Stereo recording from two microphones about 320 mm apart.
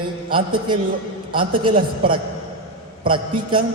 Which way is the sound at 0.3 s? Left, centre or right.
Centre.